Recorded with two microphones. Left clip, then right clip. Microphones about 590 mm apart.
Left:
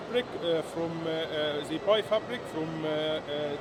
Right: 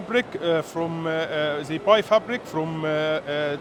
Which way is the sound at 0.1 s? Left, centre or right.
Right.